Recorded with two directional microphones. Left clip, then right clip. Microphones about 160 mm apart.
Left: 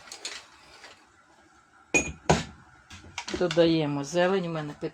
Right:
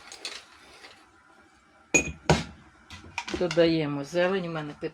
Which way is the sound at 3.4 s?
15° left (ahead or behind).